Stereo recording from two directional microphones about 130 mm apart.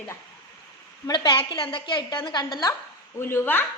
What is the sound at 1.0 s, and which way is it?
A woman's voice, 30° left (ahead or behind).